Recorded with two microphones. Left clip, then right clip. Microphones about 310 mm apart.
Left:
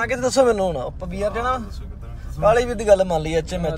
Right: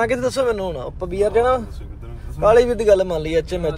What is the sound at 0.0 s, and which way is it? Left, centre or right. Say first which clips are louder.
Speech: left 1 dB; centre.